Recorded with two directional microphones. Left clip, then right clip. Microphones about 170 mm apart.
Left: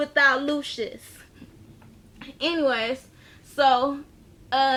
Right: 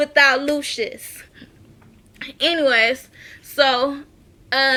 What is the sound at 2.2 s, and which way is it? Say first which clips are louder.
A woman's voice: right 6 dB; centre (ahead or behind).